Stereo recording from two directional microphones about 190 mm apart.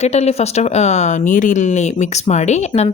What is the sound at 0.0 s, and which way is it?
Speech, 35° left (ahead or behind).